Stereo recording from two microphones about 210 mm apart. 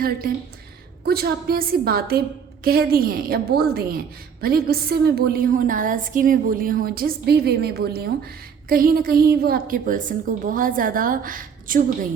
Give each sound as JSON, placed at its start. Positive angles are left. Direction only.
{"t": 1.0, "sound": "a woman's voice", "side_deg": -45}